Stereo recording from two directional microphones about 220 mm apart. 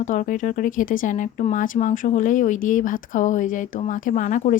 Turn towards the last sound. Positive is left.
turn(degrees=35)  # may be behind; listen again after turning